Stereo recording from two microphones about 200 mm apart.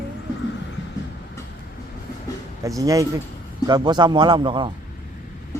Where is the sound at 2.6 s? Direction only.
15° right (ahead or behind).